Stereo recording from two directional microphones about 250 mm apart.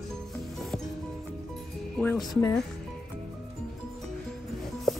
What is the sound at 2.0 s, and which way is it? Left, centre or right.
Speech, centre.